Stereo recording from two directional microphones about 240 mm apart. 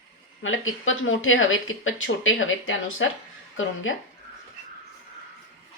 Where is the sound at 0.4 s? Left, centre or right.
Left.